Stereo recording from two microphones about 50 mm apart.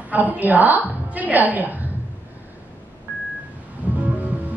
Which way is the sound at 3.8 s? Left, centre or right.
Right.